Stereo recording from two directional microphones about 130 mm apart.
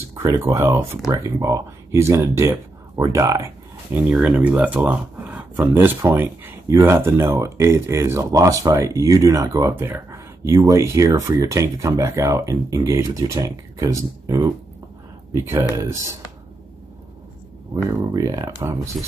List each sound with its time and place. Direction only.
0.2 s speech: 20° right (ahead or behind)
3.9 s speech: 10° right (ahead or behind)
17.8 s speech: 25° right (ahead or behind)